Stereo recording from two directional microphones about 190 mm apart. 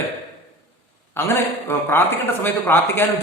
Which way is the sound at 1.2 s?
15° left (ahead or behind).